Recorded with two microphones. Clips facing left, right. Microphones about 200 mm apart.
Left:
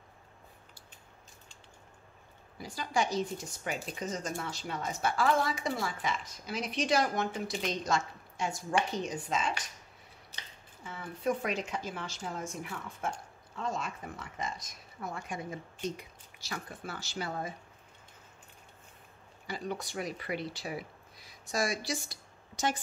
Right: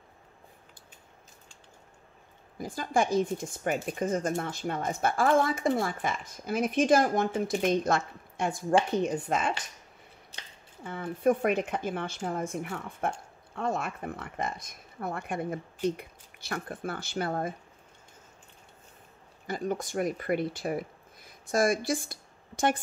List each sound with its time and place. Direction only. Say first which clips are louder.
2.5 s speech: right 5 dB; 50° right (ahead or behind)
10.8 s speech: right 8 dB; 55° right (ahead or behind)
19.4 s speech: right 6 dB; 50° right (ahead or behind)